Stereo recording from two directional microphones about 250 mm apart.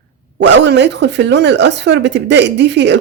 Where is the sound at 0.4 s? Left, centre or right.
Right.